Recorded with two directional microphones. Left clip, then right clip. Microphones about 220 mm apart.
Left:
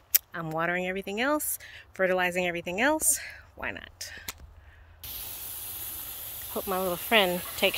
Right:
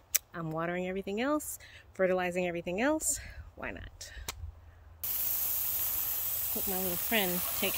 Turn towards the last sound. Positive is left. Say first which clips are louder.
# left 8 dB
turn(degrees=-5)  # may be behind; listen again after turning